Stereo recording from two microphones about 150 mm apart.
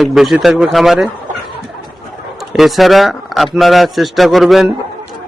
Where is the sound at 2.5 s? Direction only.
Centre (ahead or behind).